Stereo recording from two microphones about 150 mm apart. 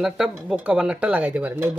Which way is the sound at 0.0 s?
5° right (ahead or behind).